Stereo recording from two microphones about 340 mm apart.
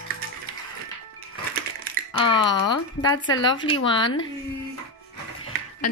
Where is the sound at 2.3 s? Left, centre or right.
Centre.